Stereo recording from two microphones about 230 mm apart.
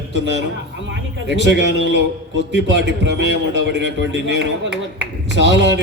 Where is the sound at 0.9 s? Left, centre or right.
Right.